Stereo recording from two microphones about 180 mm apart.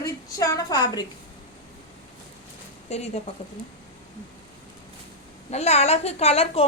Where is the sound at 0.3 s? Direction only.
20° left (ahead or behind).